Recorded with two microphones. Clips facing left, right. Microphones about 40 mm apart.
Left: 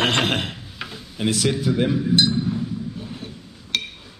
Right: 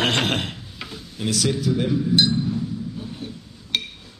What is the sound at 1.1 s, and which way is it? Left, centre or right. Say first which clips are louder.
Speech: left 2 dB; left.